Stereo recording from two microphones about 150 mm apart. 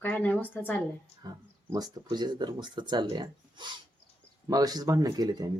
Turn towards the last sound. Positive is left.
turn(degrees=-25)  # may be behind; listen again after turning